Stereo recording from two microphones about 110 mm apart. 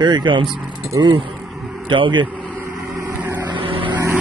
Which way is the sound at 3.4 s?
50° right (ahead or behind).